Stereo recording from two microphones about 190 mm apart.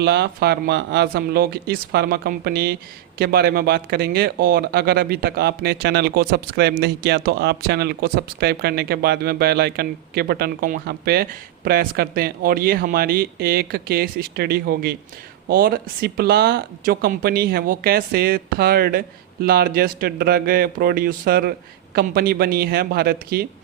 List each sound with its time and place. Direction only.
0.0 s a man's voice: 60° right (ahead or behind)